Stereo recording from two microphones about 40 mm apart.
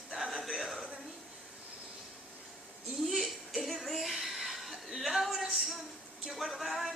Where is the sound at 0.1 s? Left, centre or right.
Centre.